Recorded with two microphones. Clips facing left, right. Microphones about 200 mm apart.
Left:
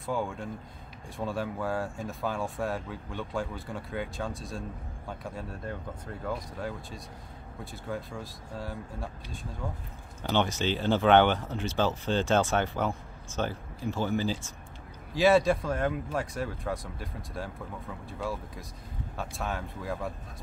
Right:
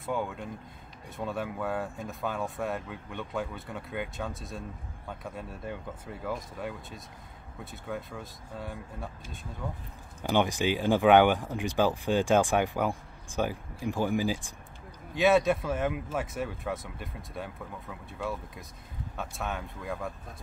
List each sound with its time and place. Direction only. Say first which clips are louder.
0.0 s speech: left 1 dB; centre (ahead or behind)
10.2 s speech: right 2 dB; 10° right (ahead or behind)
15.1 s speech: left 1 dB; centre (ahead or behind)